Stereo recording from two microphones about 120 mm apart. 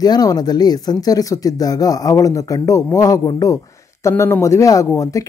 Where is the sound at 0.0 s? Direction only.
30° left (ahead or behind).